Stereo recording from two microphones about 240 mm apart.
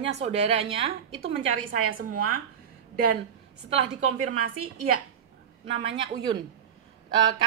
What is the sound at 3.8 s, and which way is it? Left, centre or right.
Speech, right.